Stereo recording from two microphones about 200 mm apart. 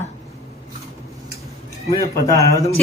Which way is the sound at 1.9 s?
15° left (ahead or behind).